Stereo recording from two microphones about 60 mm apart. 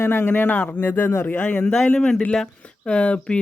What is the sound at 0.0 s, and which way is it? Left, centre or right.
Speech, left.